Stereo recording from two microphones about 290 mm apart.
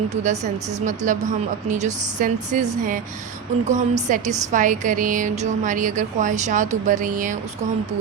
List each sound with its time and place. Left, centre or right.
0.1 s speech: right